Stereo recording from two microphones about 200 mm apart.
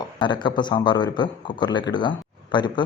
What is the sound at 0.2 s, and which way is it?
Speech, 20° left (ahead or behind).